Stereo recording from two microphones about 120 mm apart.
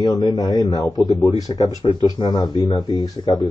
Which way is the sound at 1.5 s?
40° left (ahead or behind).